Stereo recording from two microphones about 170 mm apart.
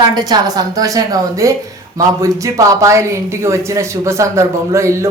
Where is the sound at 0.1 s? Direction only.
25° right (ahead or behind).